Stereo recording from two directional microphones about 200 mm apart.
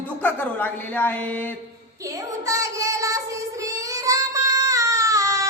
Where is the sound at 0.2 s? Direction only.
10° left (ahead or behind).